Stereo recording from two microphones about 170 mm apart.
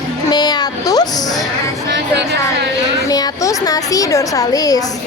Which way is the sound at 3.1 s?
20° left (ahead or behind).